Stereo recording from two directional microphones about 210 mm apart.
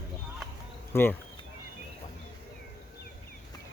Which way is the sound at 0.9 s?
10° left (ahead or behind).